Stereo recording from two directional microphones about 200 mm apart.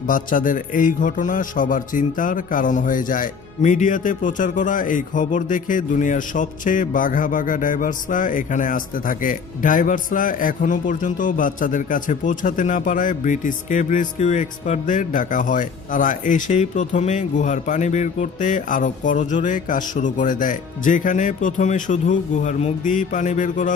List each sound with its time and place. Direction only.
0.1 s a man's voice: 45° left (ahead or behind)